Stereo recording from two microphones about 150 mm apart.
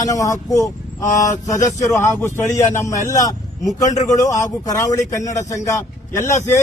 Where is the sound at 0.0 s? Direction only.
20° left (ahead or behind).